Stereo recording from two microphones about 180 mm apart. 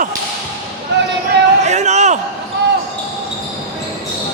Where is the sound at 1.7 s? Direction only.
40° right (ahead or behind).